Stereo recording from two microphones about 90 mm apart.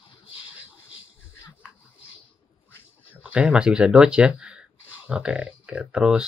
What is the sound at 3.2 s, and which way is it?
Speech, 15° right (ahead or behind).